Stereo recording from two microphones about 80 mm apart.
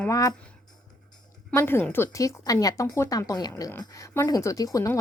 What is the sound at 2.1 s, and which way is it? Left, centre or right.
Speech, left.